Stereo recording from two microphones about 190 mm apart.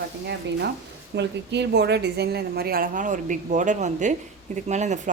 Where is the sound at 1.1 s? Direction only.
65° right (ahead or behind).